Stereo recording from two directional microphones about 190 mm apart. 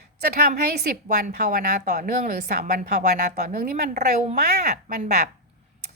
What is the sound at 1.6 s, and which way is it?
Speech, 50° right (ahead or behind).